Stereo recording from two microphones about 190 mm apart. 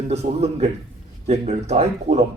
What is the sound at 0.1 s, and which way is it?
A man's voice, 35° right (ahead or behind).